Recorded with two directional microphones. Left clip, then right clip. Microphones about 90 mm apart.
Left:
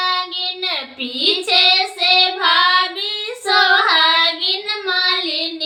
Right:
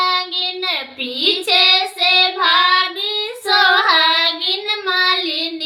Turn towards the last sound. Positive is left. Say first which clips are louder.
# right 2 dB
turn(degrees=-40)  # may be behind; listen again after turning